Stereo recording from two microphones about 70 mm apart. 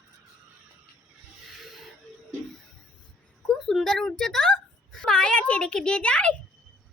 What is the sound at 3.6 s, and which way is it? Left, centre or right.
A woman's voice, centre.